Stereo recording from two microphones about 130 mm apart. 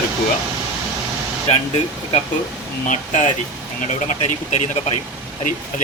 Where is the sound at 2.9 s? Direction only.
70° left (ahead or behind).